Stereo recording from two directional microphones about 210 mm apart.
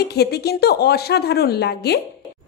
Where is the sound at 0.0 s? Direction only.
50° left (ahead or behind).